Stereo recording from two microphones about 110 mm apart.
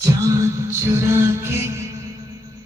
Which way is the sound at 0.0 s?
30° right (ahead or behind).